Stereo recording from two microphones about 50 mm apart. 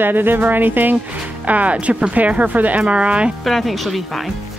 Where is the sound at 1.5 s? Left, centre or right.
Right.